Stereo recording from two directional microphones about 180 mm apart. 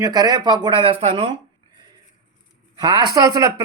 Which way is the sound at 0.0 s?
20° right (ahead or behind).